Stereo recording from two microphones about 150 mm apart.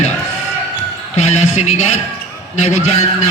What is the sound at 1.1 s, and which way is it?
Speech, 50° left (ahead or behind).